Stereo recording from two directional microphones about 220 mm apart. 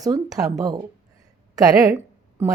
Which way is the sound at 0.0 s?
15° right (ahead or behind).